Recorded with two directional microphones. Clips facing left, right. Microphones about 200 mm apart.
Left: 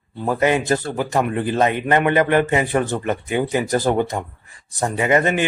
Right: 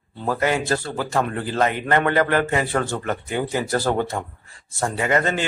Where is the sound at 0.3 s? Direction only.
20° left (ahead or behind).